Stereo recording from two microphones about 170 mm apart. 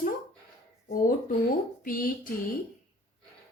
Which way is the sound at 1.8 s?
55° left (ahead or behind).